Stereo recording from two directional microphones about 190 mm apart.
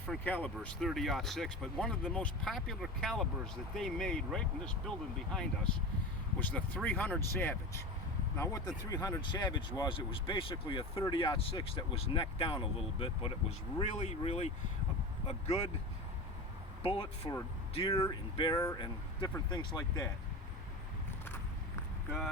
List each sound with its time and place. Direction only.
0.1 s speech: 10° left (ahead or behind); by 14.5 s 35° left (ahead or behind)
16.8 s speech: 30° left (ahead or behind)